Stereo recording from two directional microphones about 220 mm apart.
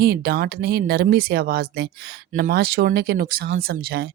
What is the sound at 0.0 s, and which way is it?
Speech, 45° right (ahead or behind).